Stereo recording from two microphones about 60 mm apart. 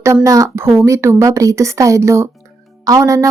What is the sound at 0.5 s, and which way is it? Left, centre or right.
Speech, right.